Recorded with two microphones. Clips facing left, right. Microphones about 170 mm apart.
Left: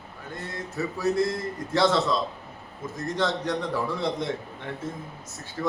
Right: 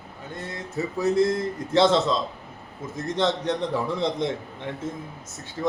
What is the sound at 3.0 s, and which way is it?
Speech, 20° right (ahead or behind).